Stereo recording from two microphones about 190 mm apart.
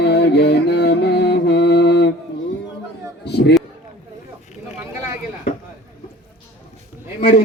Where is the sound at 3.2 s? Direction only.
60° left (ahead or behind).